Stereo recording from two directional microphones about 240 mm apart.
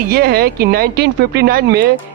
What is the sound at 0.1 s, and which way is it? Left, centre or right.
A man's voice, right.